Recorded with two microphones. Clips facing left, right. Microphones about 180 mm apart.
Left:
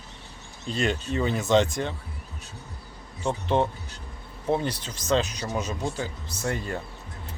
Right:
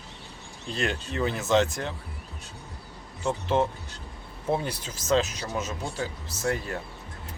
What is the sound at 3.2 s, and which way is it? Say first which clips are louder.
Speech: left 1 dB; 5° right (ahead or behind).